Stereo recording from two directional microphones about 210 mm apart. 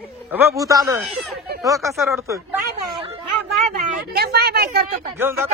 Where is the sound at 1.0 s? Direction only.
5° right (ahead or behind).